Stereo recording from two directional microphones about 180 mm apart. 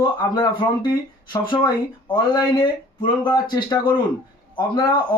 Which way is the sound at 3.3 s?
25° left (ahead or behind).